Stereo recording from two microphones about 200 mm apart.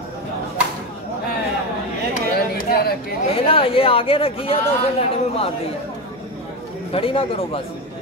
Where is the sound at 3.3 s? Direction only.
30° left (ahead or behind).